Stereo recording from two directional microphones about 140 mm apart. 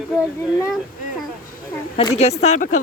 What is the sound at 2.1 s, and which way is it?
Speech, 50° left (ahead or behind).